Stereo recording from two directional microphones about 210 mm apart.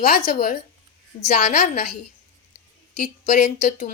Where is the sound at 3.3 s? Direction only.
35° left (ahead or behind).